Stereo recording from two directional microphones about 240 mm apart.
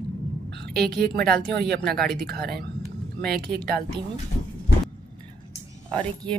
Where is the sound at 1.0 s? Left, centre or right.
Right.